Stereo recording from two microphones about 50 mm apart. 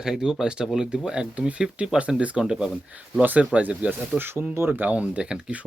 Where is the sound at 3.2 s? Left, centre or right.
Right.